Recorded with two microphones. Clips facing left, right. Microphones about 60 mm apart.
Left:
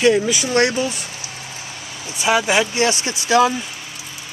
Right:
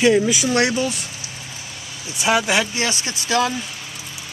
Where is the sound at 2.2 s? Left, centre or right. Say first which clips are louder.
Left 2 dB; centre.